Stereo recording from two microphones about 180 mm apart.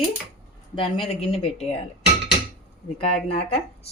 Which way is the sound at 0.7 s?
30° left (ahead or behind).